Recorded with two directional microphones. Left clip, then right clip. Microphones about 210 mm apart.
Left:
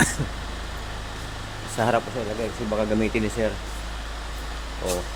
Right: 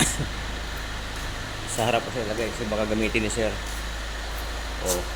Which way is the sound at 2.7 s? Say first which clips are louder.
Left 1 dB; 20° left (ahead or behind).